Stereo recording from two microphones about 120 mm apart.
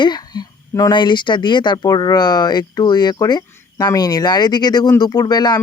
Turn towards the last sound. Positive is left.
turn(degrees=35)  # may be behind; listen again after turning